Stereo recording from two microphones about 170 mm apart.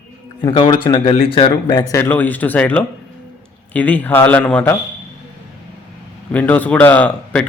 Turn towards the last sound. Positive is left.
turn(degrees=10)  # may be behind; listen again after turning